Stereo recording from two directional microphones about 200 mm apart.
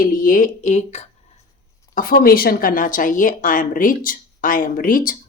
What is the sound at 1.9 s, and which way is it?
Speech, 45° left (ahead or behind).